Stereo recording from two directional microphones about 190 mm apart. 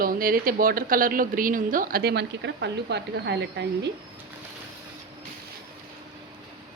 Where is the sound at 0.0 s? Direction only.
50° right (ahead or behind).